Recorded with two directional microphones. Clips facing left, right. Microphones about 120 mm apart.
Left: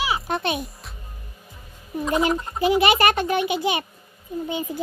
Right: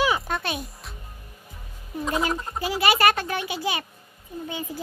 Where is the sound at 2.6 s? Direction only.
20° left (ahead or behind).